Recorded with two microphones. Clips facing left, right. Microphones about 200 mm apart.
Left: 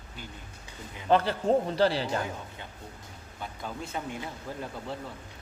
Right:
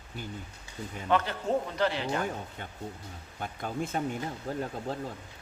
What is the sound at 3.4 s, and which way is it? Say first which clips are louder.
Speech: right 4 dB; 50° right (ahead or behind).